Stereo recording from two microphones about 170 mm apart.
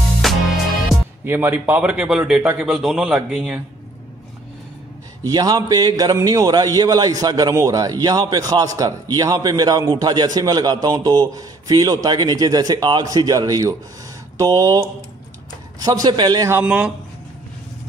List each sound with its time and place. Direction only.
0.2 s music: centre (ahead or behind)
1.2 s a man's voice: 15° right (ahead or behind)
5.2 s a man's voice: 25° right (ahead or behind)